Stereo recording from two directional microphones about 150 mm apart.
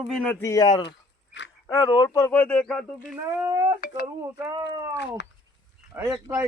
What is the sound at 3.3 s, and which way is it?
Speech, 20° right (ahead or behind).